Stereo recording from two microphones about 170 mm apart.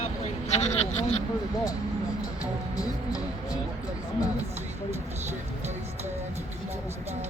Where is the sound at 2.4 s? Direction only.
20° left (ahead or behind).